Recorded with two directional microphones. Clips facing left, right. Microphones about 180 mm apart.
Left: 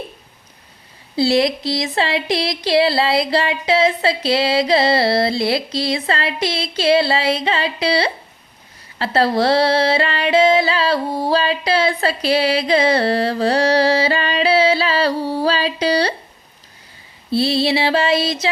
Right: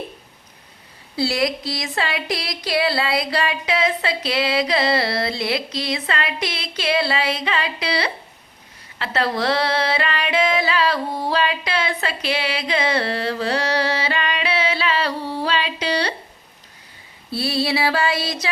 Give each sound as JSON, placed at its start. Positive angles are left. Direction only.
{"t": 1.1, "sound": "speech", "side_deg": 25}
{"t": 9.0, "sound": "music", "side_deg": 35}
{"t": 17.3, "sound": "speech", "side_deg": 25}